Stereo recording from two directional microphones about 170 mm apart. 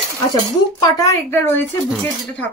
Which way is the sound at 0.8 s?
20° left (ahead or behind).